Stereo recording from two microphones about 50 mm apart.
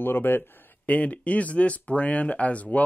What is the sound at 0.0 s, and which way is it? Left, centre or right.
Speech, left.